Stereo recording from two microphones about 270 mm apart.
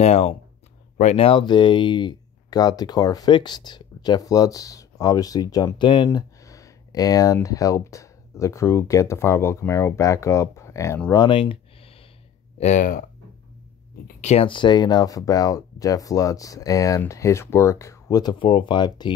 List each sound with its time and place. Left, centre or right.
0.0 s speech: left
14.2 s speech: left